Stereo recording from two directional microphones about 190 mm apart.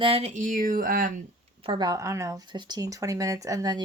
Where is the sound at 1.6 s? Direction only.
20° right (ahead or behind).